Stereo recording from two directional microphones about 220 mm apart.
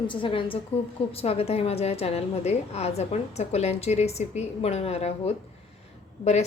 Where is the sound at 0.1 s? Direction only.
25° left (ahead or behind).